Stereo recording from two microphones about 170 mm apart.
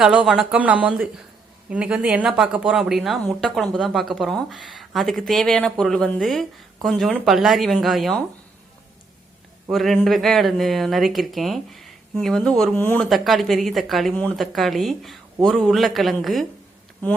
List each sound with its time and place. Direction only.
0.0 s a woman's voice: 5° right (ahead or behind)
9.6 s a woman's voice: centre (ahead or behind)
13.1 s a woman's voice: centre (ahead or behind)